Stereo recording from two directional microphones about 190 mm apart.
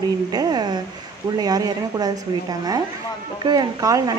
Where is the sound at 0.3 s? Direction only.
20° right (ahead or behind).